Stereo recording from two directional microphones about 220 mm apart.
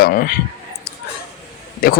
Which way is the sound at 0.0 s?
40° left (ahead or behind).